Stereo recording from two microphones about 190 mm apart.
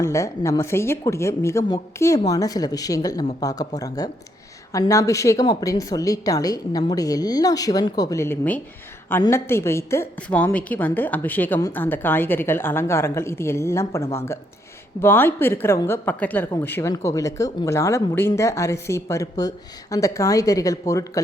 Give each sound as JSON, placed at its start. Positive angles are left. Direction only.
{"t": 0.0, "sound": "a woman's voice", "side_deg": 15}